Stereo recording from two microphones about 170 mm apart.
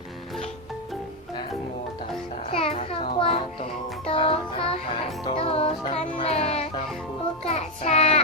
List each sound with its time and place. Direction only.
2.5 s a sound: 35° left (ahead or behind)
4.0 s music: 35° left (ahead or behind)
7.4 s child singing: 40° left (ahead or behind)